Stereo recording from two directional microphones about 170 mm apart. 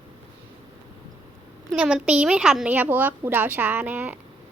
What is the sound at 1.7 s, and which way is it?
A woman's voice, 5° right (ahead or behind).